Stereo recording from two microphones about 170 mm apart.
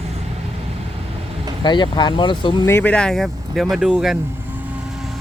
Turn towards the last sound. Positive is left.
turn(degrees=0)  # may be behind; listen again after turning